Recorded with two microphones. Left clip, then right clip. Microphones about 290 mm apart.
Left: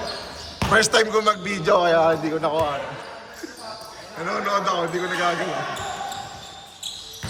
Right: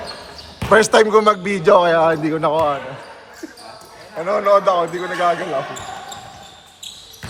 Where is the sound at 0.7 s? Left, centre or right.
Centre.